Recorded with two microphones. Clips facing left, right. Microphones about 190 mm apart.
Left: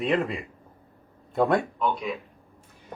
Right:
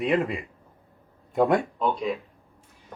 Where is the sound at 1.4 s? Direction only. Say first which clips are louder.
Right 1 dB; 10° right (ahead or behind).